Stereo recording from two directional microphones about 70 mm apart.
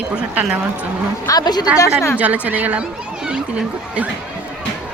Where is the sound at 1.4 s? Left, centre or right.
Left.